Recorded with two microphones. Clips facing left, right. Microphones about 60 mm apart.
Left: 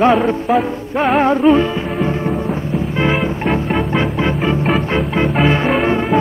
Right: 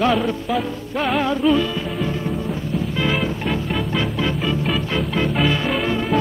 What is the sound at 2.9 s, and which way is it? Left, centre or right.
Music, left.